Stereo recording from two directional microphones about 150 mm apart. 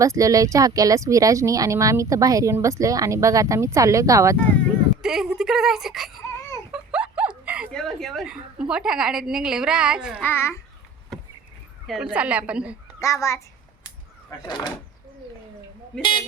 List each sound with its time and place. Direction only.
0.0 s speech: 20° right (ahead or behind)
5.0 s a woman's voice: 5° right (ahead or behind)
6.7 s a sound: 5° right (ahead or behind)
7.7 s a woman's voice: 5° left (ahead or behind)
10.2 s a child's voice: 15° left (ahead or behind)
11.9 s a woman's voice: 5° right (ahead or behind)
13.0 s a child's voice: 20° left (ahead or behind)
13.8 s a sound: 25° left (ahead or behind)